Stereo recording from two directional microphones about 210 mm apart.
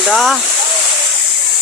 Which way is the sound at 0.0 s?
Centre (ahead or behind).